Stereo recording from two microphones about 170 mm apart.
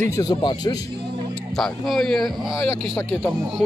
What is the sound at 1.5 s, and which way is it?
A man's voice, centre (ahead or behind).